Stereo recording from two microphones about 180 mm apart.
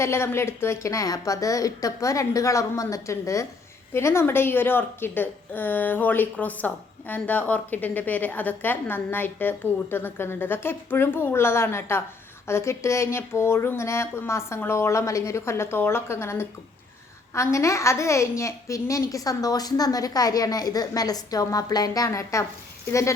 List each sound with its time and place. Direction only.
0.0 s a woman's voice: 15° left (ahead or behind)